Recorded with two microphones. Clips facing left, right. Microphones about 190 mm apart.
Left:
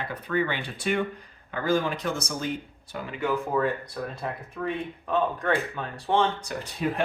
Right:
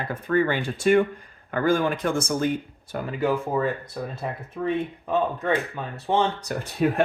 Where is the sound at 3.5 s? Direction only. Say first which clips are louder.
Right 1 dB; 10° right (ahead or behind).